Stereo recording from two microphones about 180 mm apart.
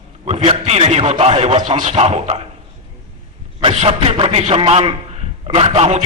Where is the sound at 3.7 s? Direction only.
35° right (ahead or behind).